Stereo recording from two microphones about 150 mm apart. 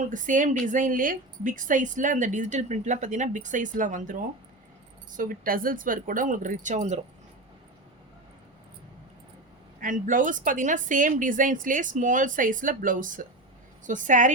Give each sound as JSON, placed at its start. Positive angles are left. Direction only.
{"t": 0.0, "sound": "speech", "side_deg": -60}
{"t": 9.8, "sound": "speech", "side_deg": -60}